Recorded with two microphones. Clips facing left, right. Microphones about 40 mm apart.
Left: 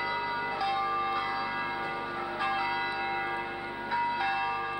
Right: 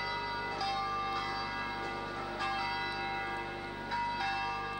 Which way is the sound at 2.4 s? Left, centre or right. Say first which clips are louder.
Left 5 dB; centre.